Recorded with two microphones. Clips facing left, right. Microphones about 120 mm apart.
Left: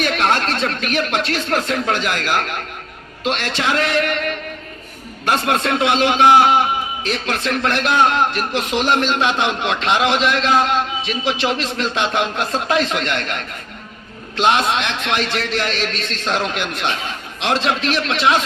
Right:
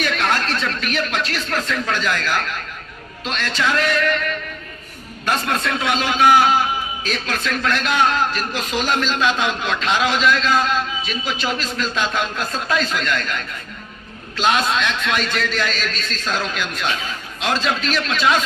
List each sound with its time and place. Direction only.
0.2 s a sound: 30° left (ahead or behind)
1.2 s speech: 75° left (ahead or behind)
6.1 s a man's voice: 25° left (ahead or behind)
7.1 s a man's voice: 60° left (ahead or behind)